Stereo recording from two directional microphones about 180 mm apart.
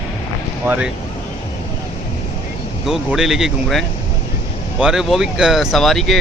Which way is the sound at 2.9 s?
Centre (ahead or behind).